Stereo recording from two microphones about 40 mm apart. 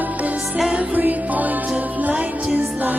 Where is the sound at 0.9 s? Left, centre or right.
Right.